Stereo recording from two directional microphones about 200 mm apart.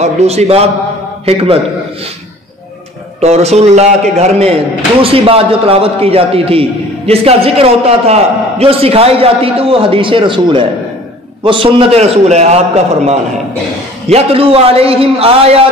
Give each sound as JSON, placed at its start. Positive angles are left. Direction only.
{"t": 0.0, "sound": "a man's voice", "side_deg": -35}
{"t": 3.2, "sound": "a man's voice", "side_deg": -35}